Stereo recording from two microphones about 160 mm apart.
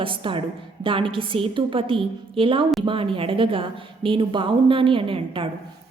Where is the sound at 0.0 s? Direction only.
30° right (ahead or behind).